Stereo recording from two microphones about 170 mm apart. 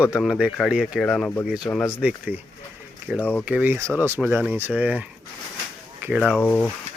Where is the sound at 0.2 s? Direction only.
Centre (ahead or behind).